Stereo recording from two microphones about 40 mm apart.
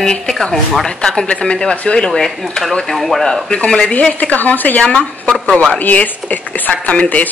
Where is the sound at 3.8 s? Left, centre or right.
Left.